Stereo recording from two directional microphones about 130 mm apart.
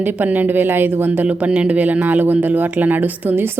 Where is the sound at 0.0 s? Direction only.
15° right (ahead or behind).